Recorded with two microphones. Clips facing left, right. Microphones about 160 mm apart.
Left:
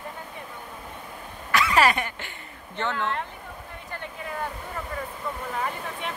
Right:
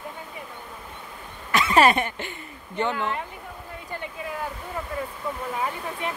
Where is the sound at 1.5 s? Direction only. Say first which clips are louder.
Right 3 dB; 25° right (ahead or behind).